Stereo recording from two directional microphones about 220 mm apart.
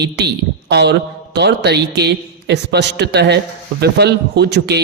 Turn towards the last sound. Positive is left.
turn(degrees=-50)  # may be behind; listen again after turning